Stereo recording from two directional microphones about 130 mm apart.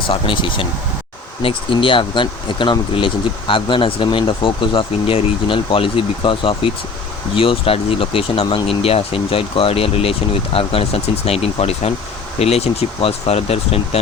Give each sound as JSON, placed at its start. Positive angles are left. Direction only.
{"t": 0.1, "sound": "speech", "side_deg": 40}